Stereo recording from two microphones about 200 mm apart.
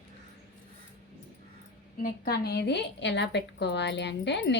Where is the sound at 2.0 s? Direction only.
50° left (ahead or behind).